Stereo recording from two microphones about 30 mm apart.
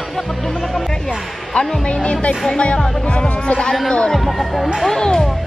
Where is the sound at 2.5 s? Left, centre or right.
Left.